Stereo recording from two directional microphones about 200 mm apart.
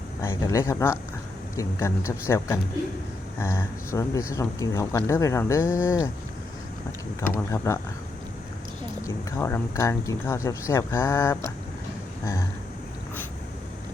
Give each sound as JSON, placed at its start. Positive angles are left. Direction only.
{"t": 0.2, "sound": "speech", "side_deg": 15}
{"t": 7.2, "sound": "speech", "side_deg": 15}
{"t": 9.0, "sound": "speech", "side_deg": 15}